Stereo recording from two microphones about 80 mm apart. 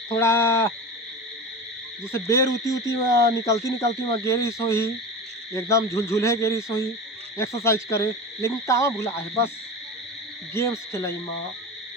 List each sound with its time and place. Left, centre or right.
0.1 s hoot: left
2.1 s frog: left
3.4 s hoot: left
10.5 s hoot: left